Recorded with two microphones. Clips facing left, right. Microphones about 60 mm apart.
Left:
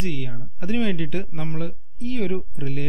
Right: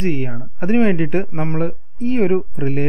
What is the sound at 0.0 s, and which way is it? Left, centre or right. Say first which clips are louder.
Speech: right 8 dB; right.